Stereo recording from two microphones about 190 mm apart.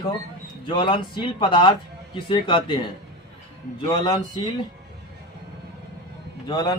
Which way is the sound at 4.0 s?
25° left (ahead or behind).